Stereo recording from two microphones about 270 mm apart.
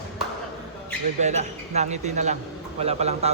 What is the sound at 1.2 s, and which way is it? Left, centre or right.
Speech, right.